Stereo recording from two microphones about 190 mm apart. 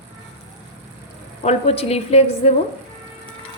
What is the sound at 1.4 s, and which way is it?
Speech, 30° left (ahead or behind).